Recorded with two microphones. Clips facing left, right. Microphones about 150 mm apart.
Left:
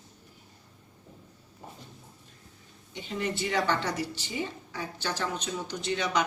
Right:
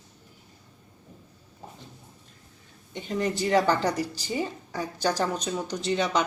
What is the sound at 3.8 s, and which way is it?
Speech, 40° right (ahead or behind).